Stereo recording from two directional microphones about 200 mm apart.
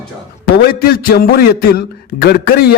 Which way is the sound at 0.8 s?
50° left (ahead or behind).